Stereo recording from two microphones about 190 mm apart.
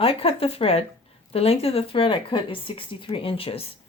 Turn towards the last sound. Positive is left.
turn(degrees=30)  # may be behind; listen again after turning